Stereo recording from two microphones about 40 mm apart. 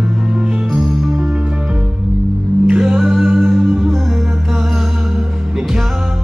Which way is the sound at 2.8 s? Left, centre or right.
Centre.